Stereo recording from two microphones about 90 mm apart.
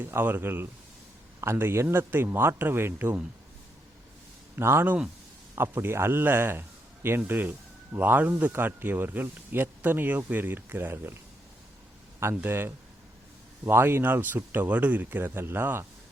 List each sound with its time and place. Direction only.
0.0 s speech: 25° right (ahead or behind)
4.5 s a man's voice: 25° right (ahead or behind)
12.2 s speech: 25° right (ahead or behind)